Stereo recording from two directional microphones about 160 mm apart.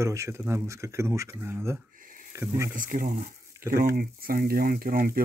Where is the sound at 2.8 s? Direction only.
55° right (ahead or behind).